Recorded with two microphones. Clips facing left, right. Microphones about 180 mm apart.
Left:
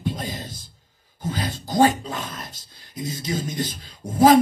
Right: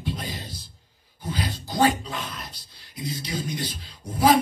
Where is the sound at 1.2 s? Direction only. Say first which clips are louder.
Left 2 dB; 45° left (ahead or behind).